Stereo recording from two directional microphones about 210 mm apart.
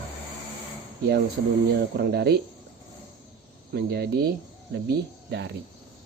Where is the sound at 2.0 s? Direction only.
50° right (ahead or behind).